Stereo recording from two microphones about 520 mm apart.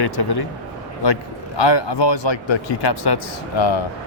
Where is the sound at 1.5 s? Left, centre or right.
Left.